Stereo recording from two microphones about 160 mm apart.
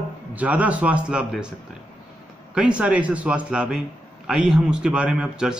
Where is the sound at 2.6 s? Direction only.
5° right (ahead or behind).